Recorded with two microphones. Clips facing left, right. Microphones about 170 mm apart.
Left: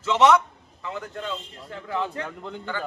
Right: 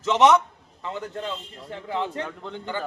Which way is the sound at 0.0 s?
20° right (ahead or behind).